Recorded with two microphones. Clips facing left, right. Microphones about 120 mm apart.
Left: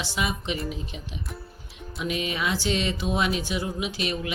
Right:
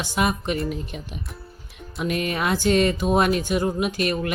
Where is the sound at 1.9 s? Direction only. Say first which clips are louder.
Right 4 dB; 50° right (ahead or behind).